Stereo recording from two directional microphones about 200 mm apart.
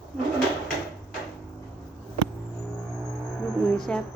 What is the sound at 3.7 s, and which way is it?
Music, 5° left (ahead or behind).